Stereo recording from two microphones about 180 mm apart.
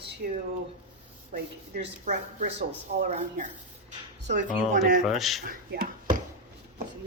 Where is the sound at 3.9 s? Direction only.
45° right (ahead or behind).